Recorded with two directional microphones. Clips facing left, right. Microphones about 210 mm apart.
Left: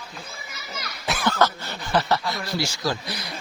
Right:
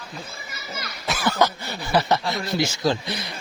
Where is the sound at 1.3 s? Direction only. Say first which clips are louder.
Right 1 dB; 15° right (ahead or behind).